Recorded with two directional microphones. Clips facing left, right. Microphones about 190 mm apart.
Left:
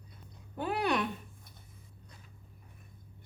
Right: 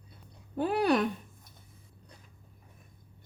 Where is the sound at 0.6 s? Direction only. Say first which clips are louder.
Right 5 dB; 30° right (ahead or behind).